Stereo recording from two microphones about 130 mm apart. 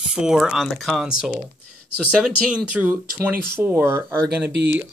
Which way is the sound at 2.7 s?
10° right (ahead or behind).